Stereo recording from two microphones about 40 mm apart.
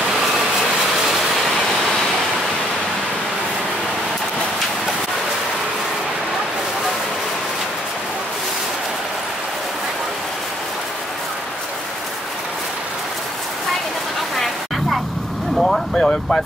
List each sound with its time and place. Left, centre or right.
15.5 s vehicle: centre